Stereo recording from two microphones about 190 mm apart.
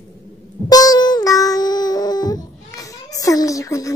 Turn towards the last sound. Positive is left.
turn(degrees=15)  # may be behind; listen again after turning